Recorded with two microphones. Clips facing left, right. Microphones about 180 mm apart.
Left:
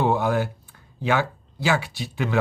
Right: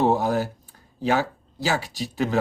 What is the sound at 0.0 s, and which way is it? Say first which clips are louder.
A woman's voice: right 1 dB; 40° right (ahead or behind).